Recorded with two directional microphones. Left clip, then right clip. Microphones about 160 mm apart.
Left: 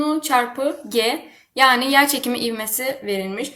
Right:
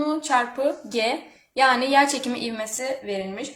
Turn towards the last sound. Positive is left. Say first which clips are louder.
# left 5 dB
turn(degrees=20)  # may be behind; listen again after turning